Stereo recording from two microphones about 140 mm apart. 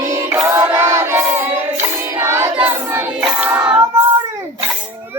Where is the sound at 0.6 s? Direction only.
20° right (ahead or behind).